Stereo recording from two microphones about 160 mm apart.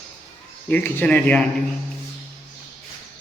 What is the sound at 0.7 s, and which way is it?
Speech, 10° left (ahead or behind).